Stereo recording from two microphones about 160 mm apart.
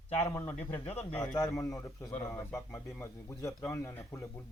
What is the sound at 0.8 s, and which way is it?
Speech, 40° left (ahead or behind).